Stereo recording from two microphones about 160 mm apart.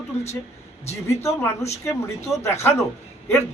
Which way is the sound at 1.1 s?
15° left (ahead or behind).